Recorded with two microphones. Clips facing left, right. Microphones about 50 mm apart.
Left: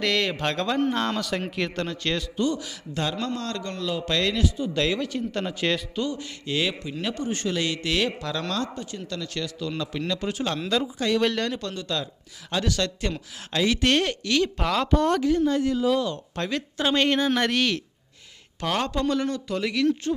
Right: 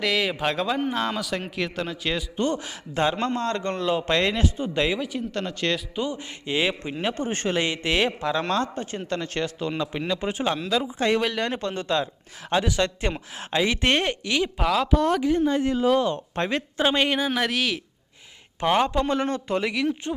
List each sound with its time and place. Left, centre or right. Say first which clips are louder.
0.0 s speech: right 1 dB; centre
2.3 s a man's voice: even; right
4.8 s speech: right 1 dB; centre
6.0 s speech: even; right
10.6 s speech: even; centre
10.9 s a man's voice: right 5 dB; right
11.2 s speech: left 2 dB; centre
11.4 s speech: right 3 dB; right; by 15.2 s centre
15.2 s speech: even; right; by 17.8 s centre
18.6 s speech: right 4 dB; right
19.1 s speech: right 2 dB; right
19.7 s speech: left 3 dB; centre